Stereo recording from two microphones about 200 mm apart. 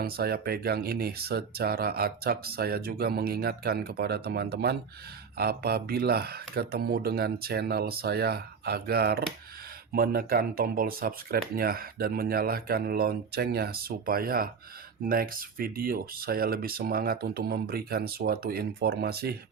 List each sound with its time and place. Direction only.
0.0 s speech: 50° right (ahead or behind)